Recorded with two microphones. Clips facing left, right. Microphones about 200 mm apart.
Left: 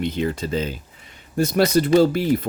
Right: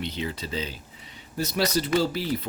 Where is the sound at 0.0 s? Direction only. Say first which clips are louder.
Left 8 dB; 50° left (ahead or behind).